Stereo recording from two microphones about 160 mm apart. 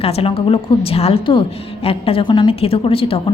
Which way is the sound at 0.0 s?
35° left (ahead or behind).